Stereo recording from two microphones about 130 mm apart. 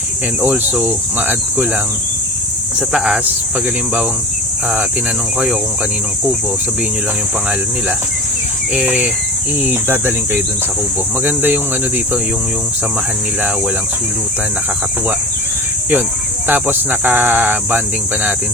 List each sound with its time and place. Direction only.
0.4 s speech: 10° right (ahead or behind)
2.9 s speech: 5° right (ahead or behind)
8.7 s speech: 10° right (ahead or behind)
16.5 s speech: 15° right (ahead or behind)